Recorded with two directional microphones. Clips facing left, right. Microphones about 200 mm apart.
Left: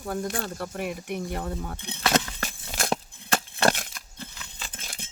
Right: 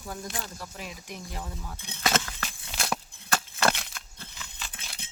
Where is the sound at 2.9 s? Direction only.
30° left (ahead or behind).